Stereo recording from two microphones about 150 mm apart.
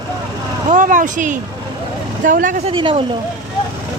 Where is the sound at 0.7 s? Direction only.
60° right (ahead or behind).